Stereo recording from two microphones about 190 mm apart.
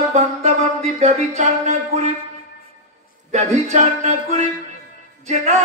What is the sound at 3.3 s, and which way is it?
A man's voice, 35° right (ahead or behind).